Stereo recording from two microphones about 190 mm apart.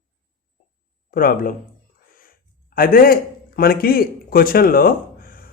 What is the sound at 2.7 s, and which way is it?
A man's voice, 50° left (ahead or behind).